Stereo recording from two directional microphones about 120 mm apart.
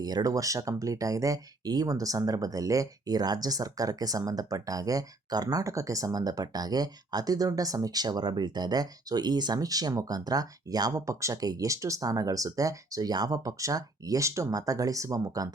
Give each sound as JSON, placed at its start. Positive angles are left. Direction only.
{"t": 0.0, "sound": "speech", "side_deg": -30}